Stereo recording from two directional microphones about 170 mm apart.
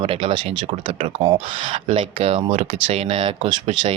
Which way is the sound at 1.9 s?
30° right (ahead or behind).